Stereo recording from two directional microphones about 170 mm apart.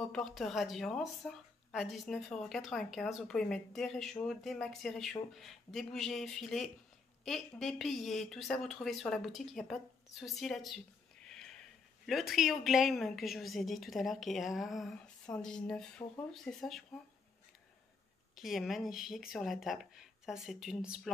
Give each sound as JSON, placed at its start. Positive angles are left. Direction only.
{"t": 0.1, "sound": "a woman's voice", "side_deg": 0}
{"t": 11.2, "sound": "a sound", "side_deg": 5}
{"t": 12.1, "sound": "a woman's voice", "side_deg": 0}
{"t": 18.3, "sound": "a woman's voice", "side_deg": 0}